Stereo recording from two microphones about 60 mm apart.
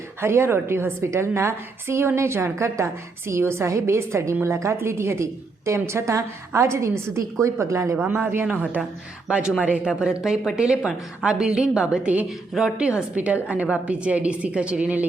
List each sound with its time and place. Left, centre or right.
0.2 s a woman's voice: right
8.0 s a woman's voice: right
9.3 s a woman's voice: centre
12.6 s a woman's voice: centre
13.1 s a woman's voice: right